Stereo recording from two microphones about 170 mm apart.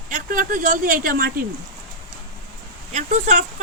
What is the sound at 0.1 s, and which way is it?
Speech, 55° right (ahead or behind).